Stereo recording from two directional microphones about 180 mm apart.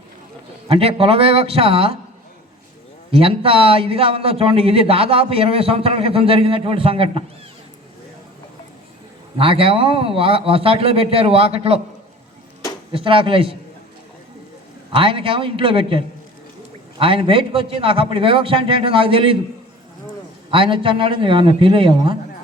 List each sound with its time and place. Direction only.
0.7 s a man's voice: 35° right (ahead or behind)
3.1 s a man's voice: 30° right (ahead or behind)
9.4 s a man's voice: 30° right (ahead or behind)
12.9 s a man's voice: 30° right (ahead or behind)
14.9 s a man's voice: 30° right (ahead or behind)
20.5 s a man's voice: 30° right (ahead or behind)